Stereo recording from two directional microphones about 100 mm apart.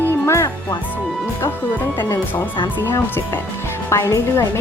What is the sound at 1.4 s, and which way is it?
A woman's voice, 20° left (ahead or behind).